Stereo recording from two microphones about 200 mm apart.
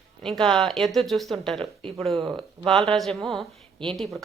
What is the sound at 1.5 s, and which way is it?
Speech, 25° right (ahead or behind).